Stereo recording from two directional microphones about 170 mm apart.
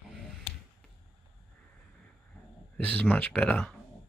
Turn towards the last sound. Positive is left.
turn(degrees=10)  # may be behind; listen again after turning